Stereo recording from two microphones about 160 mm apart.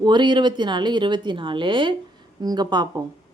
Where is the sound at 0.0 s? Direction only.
30° right (ahead or behind).